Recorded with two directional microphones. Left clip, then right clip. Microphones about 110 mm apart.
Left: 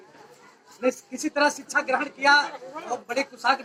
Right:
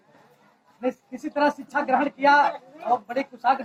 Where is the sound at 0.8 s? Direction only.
30° right (ahead or behind).